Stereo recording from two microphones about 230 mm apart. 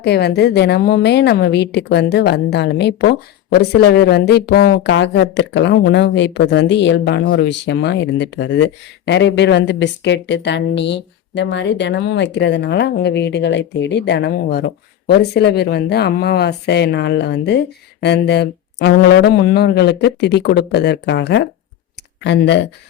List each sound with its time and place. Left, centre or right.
0.0 s a woman's voice: left